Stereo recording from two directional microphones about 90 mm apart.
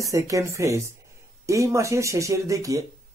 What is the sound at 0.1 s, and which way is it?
Speech, 35° right (ahead or behind).